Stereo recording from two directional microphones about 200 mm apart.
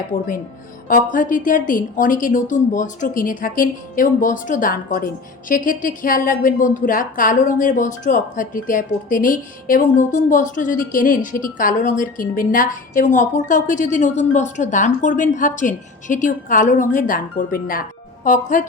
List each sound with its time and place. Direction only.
0.9 s a woman's voice: 45° left (ahead or behind)